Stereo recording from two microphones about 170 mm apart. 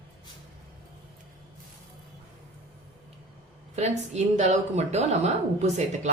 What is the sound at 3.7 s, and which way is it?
Speech, 40° right (ahead or behind).